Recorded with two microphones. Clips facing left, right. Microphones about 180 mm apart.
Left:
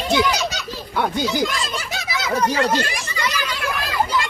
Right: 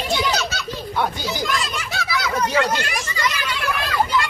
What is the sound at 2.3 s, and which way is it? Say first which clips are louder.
Speech: left 2 dB; 35° left (ahead or behind).